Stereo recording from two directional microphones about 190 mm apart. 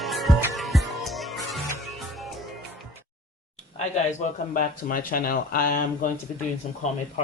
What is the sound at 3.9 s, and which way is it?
Speech, 40° left (ahead or behind).